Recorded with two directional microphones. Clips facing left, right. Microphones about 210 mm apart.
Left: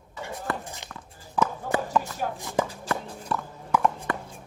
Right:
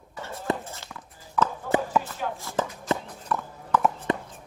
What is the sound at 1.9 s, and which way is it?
Chopping, 5° right (ahead or behind).